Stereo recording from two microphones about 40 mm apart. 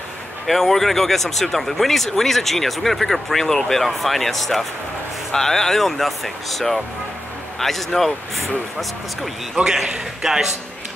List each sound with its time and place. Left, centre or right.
0.5 s speech: centre
9.6 s a man's voice: right